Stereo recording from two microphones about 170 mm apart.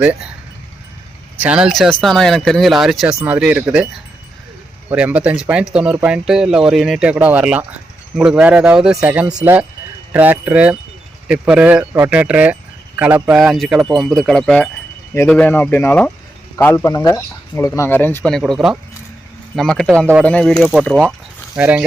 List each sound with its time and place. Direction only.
0.0 s speech: 10° right (ahead or behind)
1.4 s speech: 5° right (ahead or behind)
4.9 s speech: 10° right (ahead or behind)